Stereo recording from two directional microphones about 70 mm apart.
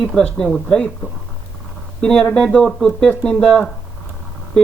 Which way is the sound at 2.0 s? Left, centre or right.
Centre.